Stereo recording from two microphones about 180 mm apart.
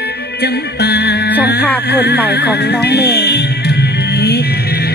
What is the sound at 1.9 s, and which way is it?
Speech, 65° left (ahead or behind).